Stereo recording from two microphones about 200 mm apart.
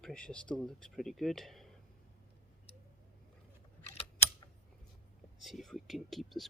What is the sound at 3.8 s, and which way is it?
Typing, 30° left (ahead or behind).